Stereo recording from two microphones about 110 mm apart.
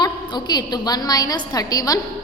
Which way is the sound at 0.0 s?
40° left (ahead or behind).